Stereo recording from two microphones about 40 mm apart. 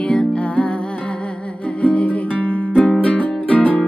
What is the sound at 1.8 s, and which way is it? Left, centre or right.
Music, left.